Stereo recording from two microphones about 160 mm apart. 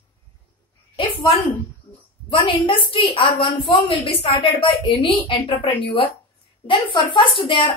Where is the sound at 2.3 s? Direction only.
35° left (ahead or behind).